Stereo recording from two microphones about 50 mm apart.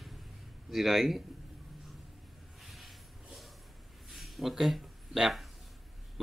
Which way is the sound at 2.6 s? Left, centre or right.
Centre.